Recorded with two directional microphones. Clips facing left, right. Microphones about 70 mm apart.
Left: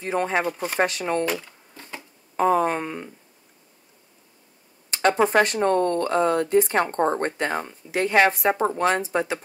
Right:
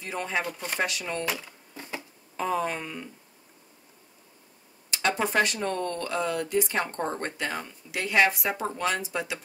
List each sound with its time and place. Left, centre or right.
0.0 s speech: left
0.5 s speech: centre
0.7 s speech: left
1.2 s a sound: centre
2.3 s speech: left
4.9 s speech: left